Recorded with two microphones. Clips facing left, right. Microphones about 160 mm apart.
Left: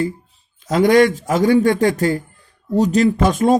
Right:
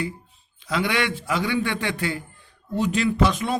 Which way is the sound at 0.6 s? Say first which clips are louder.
Left 12 dB; 45° left (ahead or behind).